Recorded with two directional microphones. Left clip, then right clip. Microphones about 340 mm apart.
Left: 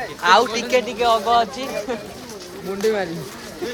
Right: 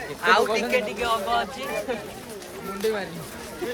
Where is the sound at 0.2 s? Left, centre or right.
Centre.